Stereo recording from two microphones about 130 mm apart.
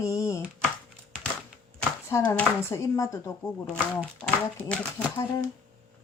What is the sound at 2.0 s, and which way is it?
Speech, 20° left (ahead or behind).